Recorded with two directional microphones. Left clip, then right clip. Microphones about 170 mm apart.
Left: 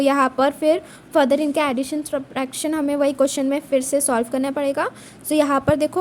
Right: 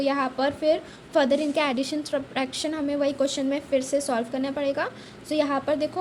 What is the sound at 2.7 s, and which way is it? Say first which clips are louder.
A woman's voice: left 8 dB; 40° left (ahead or behind).